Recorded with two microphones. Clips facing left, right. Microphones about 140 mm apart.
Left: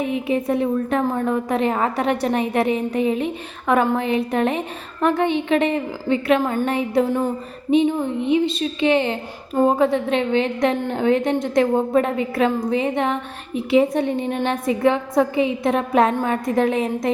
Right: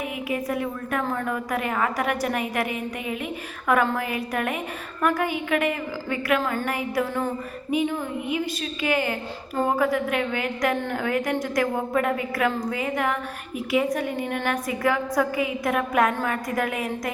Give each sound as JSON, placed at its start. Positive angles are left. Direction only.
{"t": 0.0, "sound": "a woman's voice", "side_deg": 30}